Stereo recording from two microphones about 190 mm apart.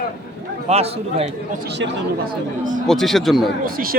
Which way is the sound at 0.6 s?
35° right (ahead or behind).